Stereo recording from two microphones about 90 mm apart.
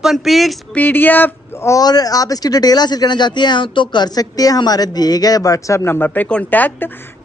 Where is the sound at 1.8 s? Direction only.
45° left (ahead or behind).